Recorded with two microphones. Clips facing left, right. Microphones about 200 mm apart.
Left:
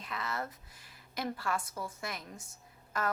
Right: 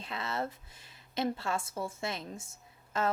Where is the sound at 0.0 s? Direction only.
25° right (ahead or behind).